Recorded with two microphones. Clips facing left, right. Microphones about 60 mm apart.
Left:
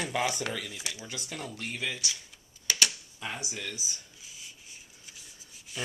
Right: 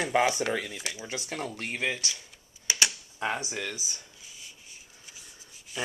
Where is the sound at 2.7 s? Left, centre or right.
Centre.